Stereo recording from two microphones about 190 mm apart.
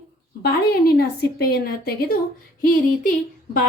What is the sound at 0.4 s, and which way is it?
A woman's voice, 55° left (ahead or behind).